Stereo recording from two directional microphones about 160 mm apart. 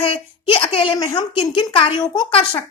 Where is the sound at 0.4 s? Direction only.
35° left (ahead or behind).